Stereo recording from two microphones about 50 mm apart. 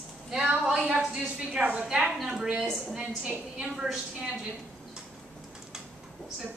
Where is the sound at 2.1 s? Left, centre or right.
Centre.